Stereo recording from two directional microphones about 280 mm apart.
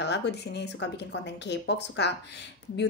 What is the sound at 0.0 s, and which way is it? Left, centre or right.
A woman's voice, left.